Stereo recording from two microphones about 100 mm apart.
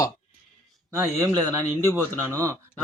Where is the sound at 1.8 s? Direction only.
25° right (ahead or behind).